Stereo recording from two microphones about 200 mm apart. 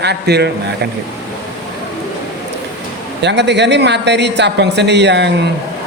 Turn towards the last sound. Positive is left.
turn(degrees=-60)  # may be behind; listen again after turning